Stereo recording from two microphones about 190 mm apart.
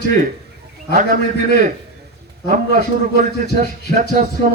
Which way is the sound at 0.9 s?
45° right (ahead or behind).